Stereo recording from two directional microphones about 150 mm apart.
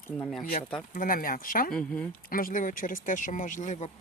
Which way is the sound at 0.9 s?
70° left (ahead or behind).